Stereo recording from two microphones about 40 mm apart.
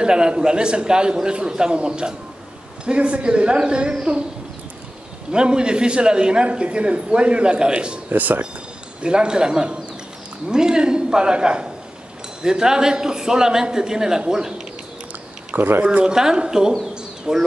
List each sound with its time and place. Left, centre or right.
0.0 s a man's voice: right
5.3 s a man's voice: right
8.1 s speech: right
9.0 s a man's voice: right
15.8 s a man's voice: right
16.1 s a man's voice: centre